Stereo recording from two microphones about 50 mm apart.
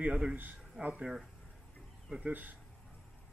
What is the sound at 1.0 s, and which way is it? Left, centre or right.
Speech, centre.